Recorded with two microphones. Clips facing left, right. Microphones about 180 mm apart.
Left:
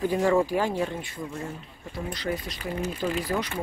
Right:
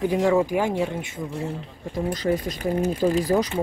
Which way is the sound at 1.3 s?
35° right (ahead or behind).